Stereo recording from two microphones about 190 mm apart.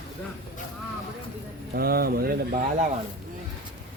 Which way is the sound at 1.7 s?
55° right (ahead or behind).